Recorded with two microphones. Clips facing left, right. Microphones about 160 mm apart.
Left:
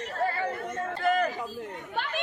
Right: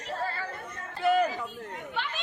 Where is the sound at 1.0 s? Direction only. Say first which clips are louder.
Right 2 dB; 10° right (ahead or behind).